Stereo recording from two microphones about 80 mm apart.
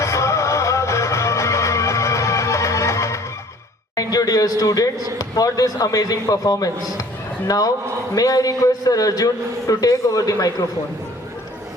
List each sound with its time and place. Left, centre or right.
0.0 s music: left
3.9 s a man's voice: left